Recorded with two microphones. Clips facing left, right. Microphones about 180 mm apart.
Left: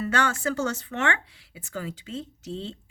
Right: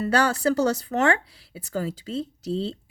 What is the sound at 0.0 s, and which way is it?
Speech, 35° right (ahead or behind).